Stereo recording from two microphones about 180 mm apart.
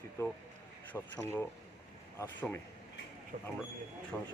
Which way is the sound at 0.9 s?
5° left (ahead or behind).